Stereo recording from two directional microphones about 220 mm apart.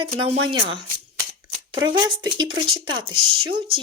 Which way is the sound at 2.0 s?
20° right (ahead or behind).